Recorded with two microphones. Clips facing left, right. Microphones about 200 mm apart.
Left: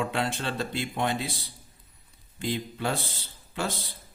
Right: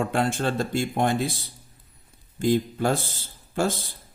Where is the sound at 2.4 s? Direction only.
45° right (ahead or behind).